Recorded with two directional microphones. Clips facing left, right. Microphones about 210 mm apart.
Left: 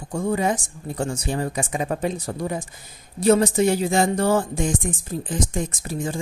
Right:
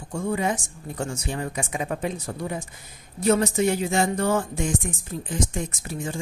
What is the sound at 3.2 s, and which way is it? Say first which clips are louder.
A woman's voice: left 3 dB; 30° left (ahead or behind).